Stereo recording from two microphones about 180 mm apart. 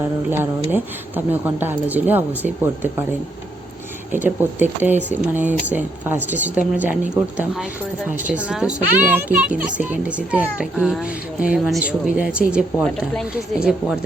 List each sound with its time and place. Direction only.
0.0 s a child's voice: 10° right (ahead or behind)
4.1 s a child's voice: 10° right (ahead or behind)